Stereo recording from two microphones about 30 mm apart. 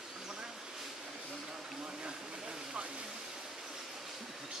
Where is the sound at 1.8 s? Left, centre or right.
Right.